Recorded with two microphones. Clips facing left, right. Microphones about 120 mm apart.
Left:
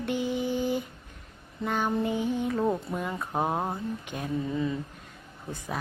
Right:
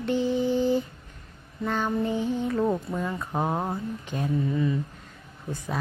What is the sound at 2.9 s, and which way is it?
Speech, 15° left (ahead or behind).